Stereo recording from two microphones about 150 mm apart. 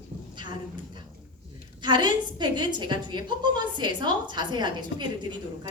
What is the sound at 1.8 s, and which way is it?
A woman's voice, 30° right (ahead or behind).